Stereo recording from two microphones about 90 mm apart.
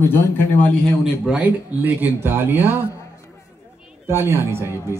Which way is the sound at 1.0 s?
15° right (ahead or behind).